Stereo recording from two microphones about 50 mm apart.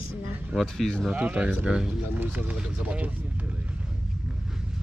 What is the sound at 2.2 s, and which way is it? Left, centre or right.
Speech, right.